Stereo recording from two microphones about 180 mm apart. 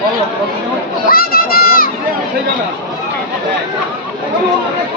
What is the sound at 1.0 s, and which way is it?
Crowd, 55° left (ahead or behind).